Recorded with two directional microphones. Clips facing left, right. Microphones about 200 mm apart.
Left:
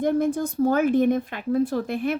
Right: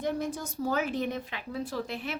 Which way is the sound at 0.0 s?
55° left (ahead or behind).